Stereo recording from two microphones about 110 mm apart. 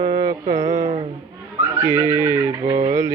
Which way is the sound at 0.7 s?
65° right (ahead or behind).